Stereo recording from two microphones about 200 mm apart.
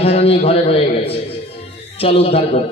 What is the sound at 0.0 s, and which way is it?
Speech, 30° left (ahead or behind).